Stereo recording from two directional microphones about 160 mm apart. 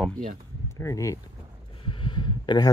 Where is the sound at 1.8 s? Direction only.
30° left (ahead or behind).